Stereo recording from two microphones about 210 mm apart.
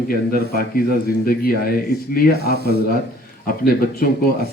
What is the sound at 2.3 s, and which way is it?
Speech, 50° right (ahead or behind).